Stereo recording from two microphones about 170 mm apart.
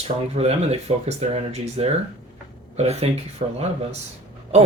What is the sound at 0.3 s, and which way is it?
Speech, 40° right (ahead or behind).